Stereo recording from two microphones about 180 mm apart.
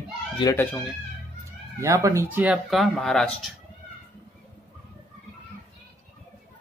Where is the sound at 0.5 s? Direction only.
5° left (ahead or behind).